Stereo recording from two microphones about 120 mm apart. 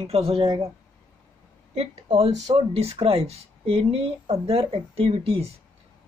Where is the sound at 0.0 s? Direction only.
55° right (ahead or behind).